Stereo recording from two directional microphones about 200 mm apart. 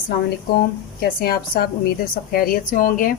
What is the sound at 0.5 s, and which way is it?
Speech, 50° left (ahead or behind).